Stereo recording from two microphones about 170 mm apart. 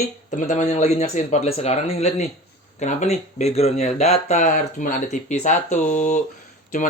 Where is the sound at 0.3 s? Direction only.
45° left (ahead or behind).